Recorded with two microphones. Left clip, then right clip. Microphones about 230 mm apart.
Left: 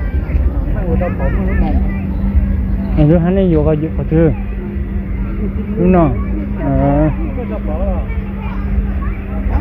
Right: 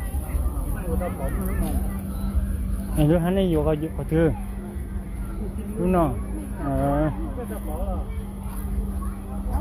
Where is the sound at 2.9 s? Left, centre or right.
Right.